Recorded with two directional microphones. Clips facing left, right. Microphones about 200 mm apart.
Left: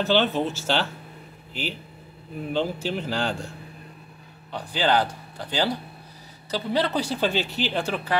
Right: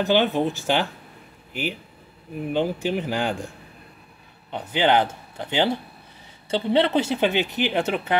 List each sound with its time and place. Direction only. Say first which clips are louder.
0.0 s speech: right 2 dB; 15° right (ahead or behind)